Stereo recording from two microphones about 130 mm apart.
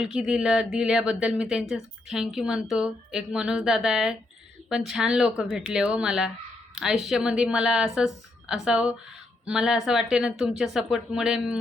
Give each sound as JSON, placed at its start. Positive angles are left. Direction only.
{"t": 0.0, "sound": "a woman's voice", "side_deg": -5}